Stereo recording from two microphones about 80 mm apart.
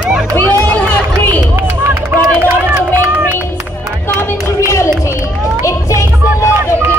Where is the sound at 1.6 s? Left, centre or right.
Right.